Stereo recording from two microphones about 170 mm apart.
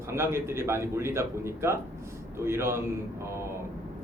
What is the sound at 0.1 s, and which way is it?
A man's voice, 15° right (ahead or behind).